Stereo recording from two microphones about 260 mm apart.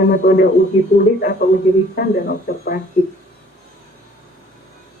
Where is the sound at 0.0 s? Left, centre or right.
Left.